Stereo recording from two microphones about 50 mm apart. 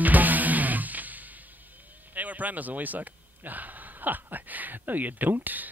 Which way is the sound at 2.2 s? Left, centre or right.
Right.